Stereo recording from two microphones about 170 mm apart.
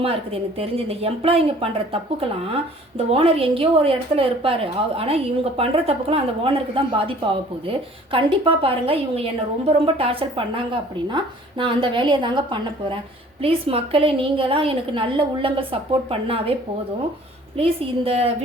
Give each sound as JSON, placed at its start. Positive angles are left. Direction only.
{"t": 0.0, "sound": "a woman's voice", "side_deg": -35}
{"t": 17.6, "sound": "a woman's voice", "side_deg": -35}